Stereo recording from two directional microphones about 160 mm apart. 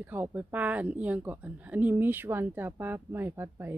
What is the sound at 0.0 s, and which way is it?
Speech, 10° right (ahead or behind).